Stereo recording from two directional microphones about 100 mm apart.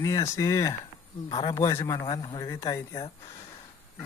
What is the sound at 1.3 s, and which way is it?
A man's voice, 50° left (ahead or behind).